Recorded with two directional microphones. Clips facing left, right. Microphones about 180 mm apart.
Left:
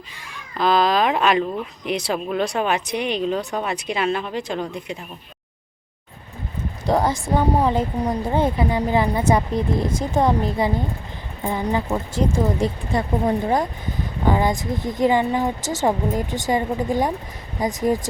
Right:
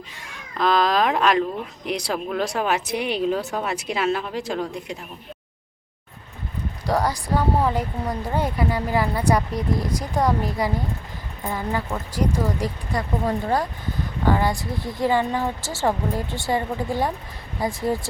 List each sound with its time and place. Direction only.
0.3 s speech: centre (ahead or behind)
6.8 s a woman's voice: 25° left (ahead or behind)